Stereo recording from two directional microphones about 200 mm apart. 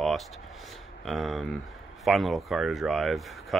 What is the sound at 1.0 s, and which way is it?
Speech, centre (ahead or behind).